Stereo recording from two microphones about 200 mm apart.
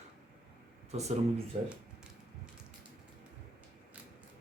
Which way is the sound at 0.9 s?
35° right (ahead or behind).